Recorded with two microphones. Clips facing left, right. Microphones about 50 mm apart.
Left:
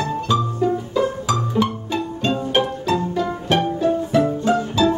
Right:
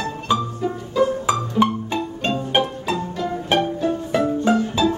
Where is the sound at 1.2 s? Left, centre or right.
Right.